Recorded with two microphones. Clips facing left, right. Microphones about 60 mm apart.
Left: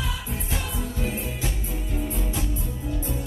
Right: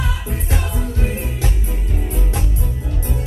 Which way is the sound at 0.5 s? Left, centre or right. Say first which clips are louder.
Right 6 dB; right.